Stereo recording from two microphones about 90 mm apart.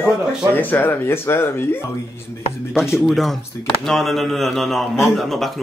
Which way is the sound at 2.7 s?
5° right (ahead or behind).